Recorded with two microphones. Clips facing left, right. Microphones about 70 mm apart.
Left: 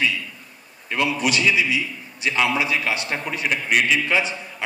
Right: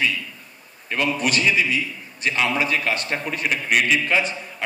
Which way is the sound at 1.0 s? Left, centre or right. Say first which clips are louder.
Even; right.